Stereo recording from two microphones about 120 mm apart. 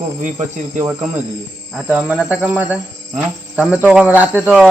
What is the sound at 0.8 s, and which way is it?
Speech, 15° right (ahead or behind).